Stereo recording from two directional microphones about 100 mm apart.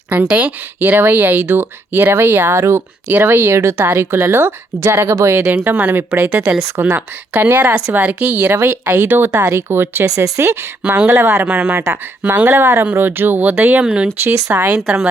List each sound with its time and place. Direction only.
0.1 s speech: 15° right (ahead or behind)
6.7 s speech: 25° right (ahead or behind)
10.1 s speech: 35° right (ahead or behind)
11.4 s speech: 10° right (ahead or behind)